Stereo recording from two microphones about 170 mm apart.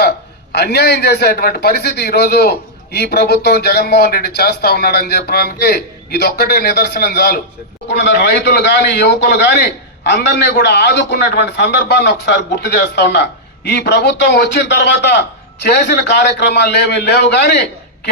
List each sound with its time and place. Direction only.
0.5 s a man's voice: 75° left (ahead or behind)
7.9 s a man's voice: 90° left